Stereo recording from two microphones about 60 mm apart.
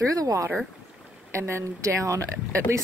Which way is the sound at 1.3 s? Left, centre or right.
Right.